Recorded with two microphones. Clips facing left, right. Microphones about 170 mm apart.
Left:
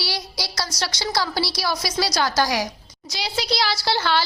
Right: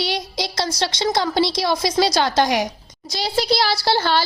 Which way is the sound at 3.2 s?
55° right (ahead or behind).